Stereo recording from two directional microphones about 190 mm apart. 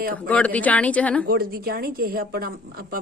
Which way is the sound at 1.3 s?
50° right (ahead or behind).